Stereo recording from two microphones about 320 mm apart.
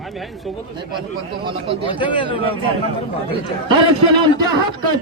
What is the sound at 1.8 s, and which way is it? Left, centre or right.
Speech, centre.